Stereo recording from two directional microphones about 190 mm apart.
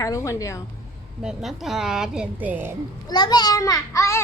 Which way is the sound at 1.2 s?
Centre (ahead or behind).